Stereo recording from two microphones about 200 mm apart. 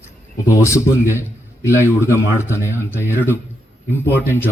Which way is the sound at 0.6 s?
15° left (ahead or behind).